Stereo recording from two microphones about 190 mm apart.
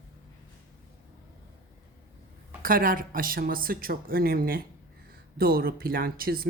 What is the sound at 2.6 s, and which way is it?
Speech, 50° right (ahead or behind).